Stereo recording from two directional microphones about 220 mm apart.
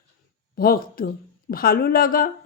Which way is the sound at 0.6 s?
40° left (ahead or behind).